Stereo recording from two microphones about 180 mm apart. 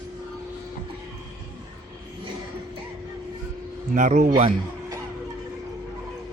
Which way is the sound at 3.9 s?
45° right (ahead or behind).